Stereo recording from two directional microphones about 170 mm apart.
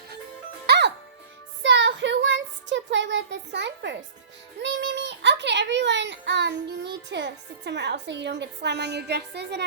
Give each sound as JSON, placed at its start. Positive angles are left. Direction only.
{"t": 0.7, "sound": "music", "side_deg": -90}
{"t": 1.6, "sound": "child singing", "side_deg": -90}